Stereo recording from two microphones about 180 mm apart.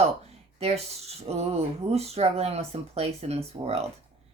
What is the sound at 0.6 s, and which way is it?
Speech, 35° right (ahead or behind).